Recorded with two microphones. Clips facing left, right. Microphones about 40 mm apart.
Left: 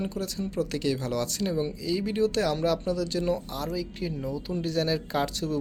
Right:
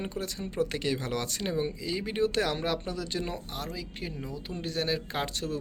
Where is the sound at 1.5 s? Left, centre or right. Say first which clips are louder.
Even; right.